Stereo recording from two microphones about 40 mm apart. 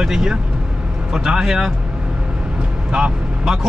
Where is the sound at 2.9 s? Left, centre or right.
Right.